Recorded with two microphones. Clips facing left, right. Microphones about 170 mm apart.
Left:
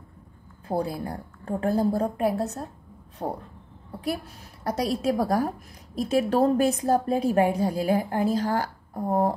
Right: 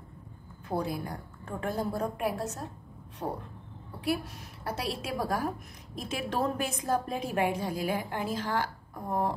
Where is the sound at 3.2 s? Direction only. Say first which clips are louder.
Left 4 dB; 45° left (ahead or behind).